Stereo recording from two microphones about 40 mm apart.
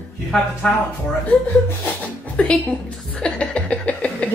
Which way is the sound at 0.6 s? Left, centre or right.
Left.